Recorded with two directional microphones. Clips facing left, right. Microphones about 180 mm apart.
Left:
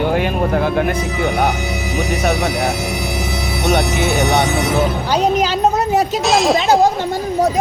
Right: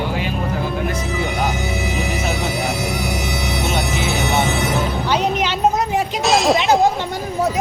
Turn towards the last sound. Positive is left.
turn(degrees=0)  # may be behind; listen again after turning